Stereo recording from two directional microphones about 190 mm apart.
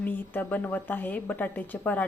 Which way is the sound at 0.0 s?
10° left (ahead or behind).